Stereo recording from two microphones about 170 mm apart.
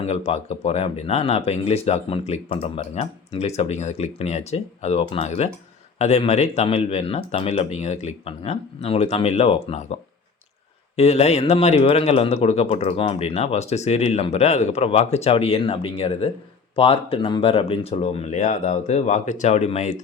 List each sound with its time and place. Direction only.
0.0 s speech: 40° left (ahead or behind)